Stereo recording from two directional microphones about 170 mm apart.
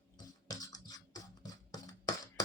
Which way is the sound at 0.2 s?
20° left (ahead or behind).